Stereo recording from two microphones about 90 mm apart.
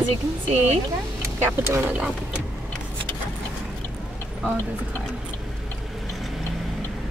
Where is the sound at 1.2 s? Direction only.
30° right (ahead or behind).